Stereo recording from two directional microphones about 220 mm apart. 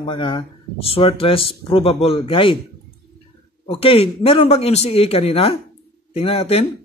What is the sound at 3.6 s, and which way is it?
Speech, 25° left (ahead or behind).